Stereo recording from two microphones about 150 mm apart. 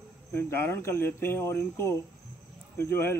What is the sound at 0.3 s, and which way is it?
Speech, 15° left (ahead or behind).